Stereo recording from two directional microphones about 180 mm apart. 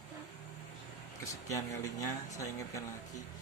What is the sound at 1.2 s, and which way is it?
Speech, 15° left (ahead or behind).